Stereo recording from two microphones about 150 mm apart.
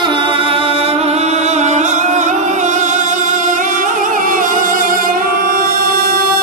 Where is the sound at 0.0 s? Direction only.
35° right (ahead or behind).